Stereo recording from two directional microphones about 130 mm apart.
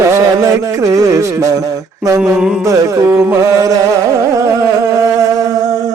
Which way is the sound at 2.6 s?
25° right (ahead or behind).